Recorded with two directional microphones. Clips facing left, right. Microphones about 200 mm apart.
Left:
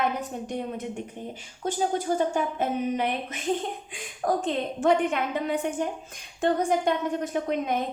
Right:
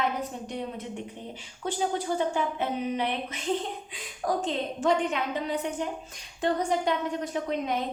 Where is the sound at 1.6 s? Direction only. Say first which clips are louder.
Left 2 dB; 45° left (ahead or behind).